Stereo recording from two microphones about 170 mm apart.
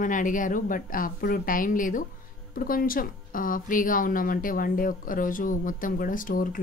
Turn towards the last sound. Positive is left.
turn(degrees=55)  # may be behind; listen again after turning